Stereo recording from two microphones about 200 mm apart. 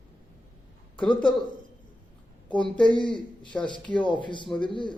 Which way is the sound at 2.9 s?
25° left (ahead or behind).